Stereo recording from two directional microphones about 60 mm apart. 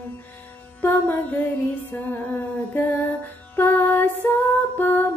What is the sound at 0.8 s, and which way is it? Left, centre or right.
Music, left.